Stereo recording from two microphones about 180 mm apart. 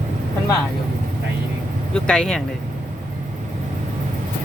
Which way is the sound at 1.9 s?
5° left (ahead or behind).